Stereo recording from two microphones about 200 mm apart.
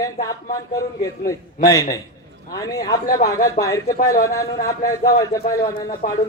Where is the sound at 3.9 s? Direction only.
45° left (ahead or behind).